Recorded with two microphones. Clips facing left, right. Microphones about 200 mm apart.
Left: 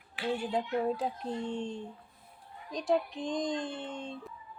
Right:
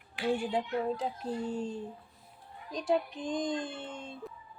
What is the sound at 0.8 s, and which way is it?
A woman's voice, centre (ahead or behind).